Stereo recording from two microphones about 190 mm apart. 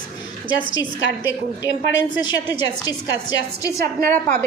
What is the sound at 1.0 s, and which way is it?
A woman's voice, 75° left (ahead or behind).